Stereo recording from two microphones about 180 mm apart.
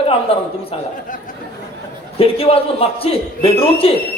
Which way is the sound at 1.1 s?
50° left (ahead or behind).